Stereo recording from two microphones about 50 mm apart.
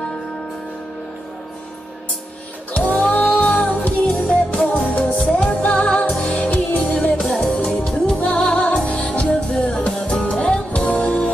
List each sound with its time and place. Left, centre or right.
2.7 s music: left
7.2 s music: centre